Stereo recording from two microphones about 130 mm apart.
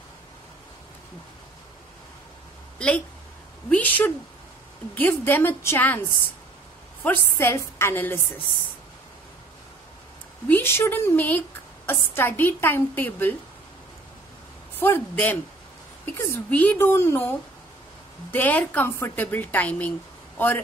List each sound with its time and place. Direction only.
2.8 s a woman's voice: 10° left (ahead or behind)
7.0 s a woman's voice: 15° left (ahead or behind)
10.5 s a woman's voice: 20° left (ahead or behind)
14.8 s a man's voice: 15° left (ahead or behind)